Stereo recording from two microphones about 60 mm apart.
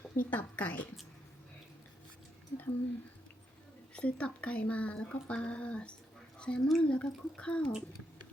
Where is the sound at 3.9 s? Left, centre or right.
Centre.